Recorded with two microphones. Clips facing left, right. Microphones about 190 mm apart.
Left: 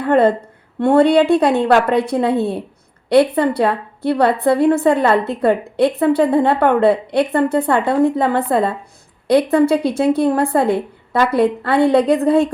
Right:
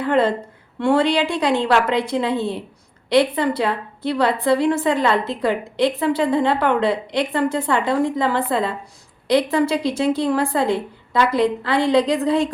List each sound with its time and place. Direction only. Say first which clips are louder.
0.0 s a woman's voice: left 5 dB; 55° left (ahead or behind)